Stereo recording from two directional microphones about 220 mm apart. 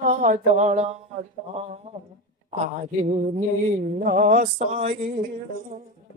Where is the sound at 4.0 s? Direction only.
35° right (ahead or behind).